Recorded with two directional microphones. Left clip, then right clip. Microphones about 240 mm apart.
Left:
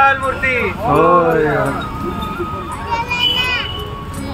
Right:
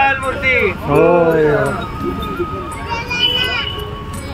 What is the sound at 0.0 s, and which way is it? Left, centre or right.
Vehicle, centre.